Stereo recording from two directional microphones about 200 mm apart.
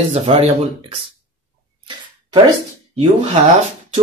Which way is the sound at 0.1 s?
30° right (ahead or behind).